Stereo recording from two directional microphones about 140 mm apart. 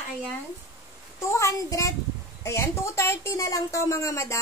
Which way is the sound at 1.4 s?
20° left (ahead or behind).